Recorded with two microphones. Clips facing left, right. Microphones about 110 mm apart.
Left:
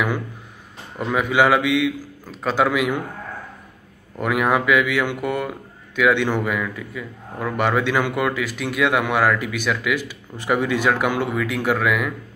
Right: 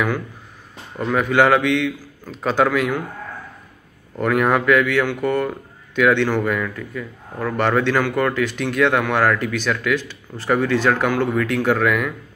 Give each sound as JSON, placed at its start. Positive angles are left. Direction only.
{"t": 0.9, "sound": "a man's voice", "side_deg": 10}
{"t": 4.2, "sound": "a man's voice", "side_deg": 10}
{"t": 6.2, "sound": "a man's voice", "side_deg": 15}
{"t": 6.5, "sound": "a man's voice", "side_deg": 5}